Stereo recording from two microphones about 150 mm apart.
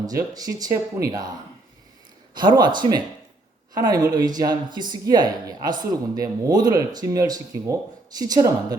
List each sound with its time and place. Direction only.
0.0 s speech: 25° right (ahead or behind)
2.3 s speech: 30° right (ahead or behind)